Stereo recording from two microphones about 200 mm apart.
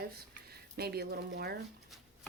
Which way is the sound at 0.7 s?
55° right (ahead or behind).